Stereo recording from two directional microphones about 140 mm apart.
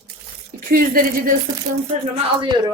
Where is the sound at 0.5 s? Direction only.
90° right.